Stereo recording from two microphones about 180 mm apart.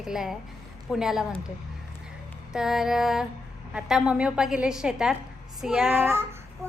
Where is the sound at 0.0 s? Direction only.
Centre (ahead or behind).